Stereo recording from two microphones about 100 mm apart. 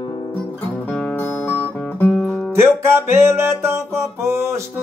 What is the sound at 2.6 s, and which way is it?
Music, 25° right (ahead or behind).